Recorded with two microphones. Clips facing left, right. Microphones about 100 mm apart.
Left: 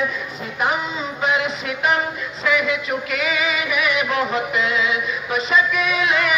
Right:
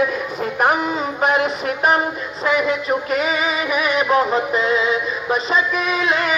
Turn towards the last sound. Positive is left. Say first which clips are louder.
# right 1 dB
turn(degrees=-35)  # may be behind; listen again after turning